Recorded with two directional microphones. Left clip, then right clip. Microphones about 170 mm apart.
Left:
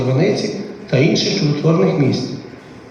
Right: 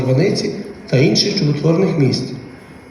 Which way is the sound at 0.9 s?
55° right (ahead or behind).